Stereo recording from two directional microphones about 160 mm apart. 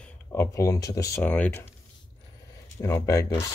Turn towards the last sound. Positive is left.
turn(degrees=20)  # may be behind; listen again after turning